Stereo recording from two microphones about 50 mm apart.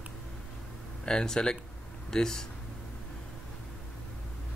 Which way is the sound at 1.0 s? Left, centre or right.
Centre.